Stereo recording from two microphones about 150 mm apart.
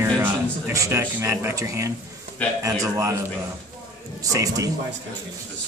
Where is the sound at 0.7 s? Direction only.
20° right (ahead or behind).